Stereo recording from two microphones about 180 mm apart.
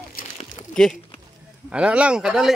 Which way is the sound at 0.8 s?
5° left (ahead or behind).